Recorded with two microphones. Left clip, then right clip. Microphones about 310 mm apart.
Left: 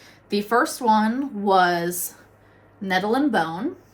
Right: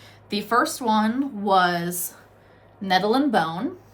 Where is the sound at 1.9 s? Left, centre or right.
Centre.